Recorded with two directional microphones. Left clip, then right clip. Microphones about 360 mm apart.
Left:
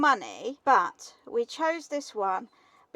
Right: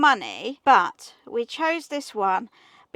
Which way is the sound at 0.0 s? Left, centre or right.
Right.